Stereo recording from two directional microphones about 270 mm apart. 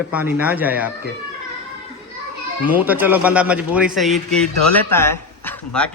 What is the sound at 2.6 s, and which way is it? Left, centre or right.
Speech, centre.